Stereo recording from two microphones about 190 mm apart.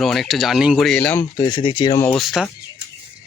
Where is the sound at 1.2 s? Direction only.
20° left (ahead or behind).